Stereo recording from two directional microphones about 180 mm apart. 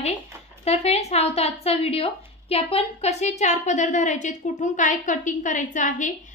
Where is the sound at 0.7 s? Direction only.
35° left (ahead or behind).